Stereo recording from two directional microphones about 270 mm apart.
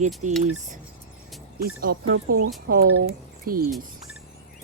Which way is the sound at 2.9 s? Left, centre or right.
Right.